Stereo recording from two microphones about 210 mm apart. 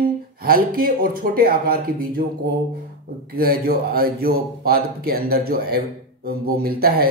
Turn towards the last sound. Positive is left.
turn(degrees=-45)  # may be behind; listen again after turning